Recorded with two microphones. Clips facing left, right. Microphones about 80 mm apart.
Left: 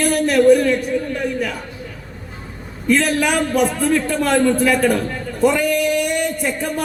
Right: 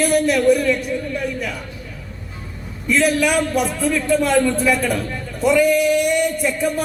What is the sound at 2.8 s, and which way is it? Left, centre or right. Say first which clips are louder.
A man's voice: even; left.